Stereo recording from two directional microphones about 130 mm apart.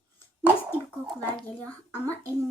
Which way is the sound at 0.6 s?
15° left (ahead or behind).